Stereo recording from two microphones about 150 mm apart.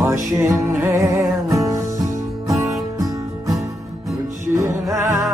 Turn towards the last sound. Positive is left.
turn(degrees=-20)  # may be behind; listen again after turning